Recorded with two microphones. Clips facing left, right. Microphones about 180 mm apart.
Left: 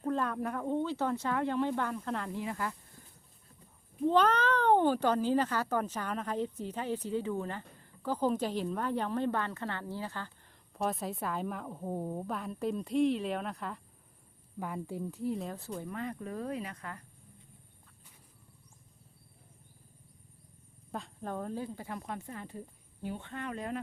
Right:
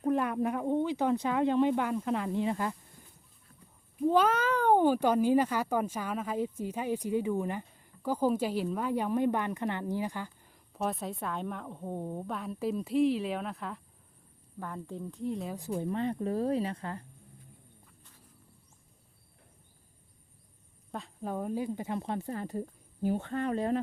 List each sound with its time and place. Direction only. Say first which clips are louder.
0.0 s speech: right 4 dB; 15° right (ahead or behind)
3.9 s speech: right 1 dB; 5° right (ahead or behind)
10.8 s a woman's voice: even; centre (ahead or behind)
15.5 s speech: right 6 dB; 15° right (ahead or behind)
15.9 s speech: right 8 dB; 30° right (ahead or behind)
20.9 s speech: right 2 dB; centre (ahead or behind); by 23.8 s 35° right (ahead or behind)